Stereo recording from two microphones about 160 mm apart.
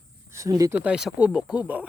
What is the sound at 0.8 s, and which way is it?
Speech, 5° right (ahead or behind).